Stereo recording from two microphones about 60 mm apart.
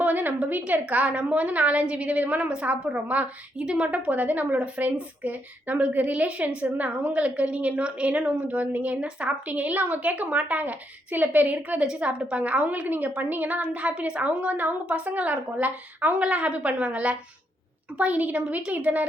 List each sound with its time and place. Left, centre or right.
0.0 s a woman's voice: right